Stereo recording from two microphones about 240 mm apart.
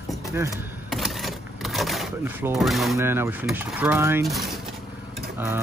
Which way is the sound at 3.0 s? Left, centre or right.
Centre.